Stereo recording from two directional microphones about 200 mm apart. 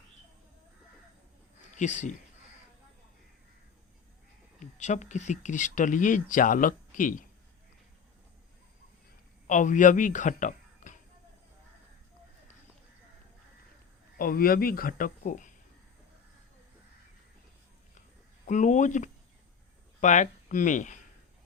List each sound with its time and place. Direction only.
1.7 s speech: 35° left (ahead or behind)
4.6 s speech: 35° left (ahead or behind)
9.5 s speech: 40° left (ahead or behind)
14.2 s speech: 45° left (ahead or behind)
18.4 s speech: 40° left (ahead or behind)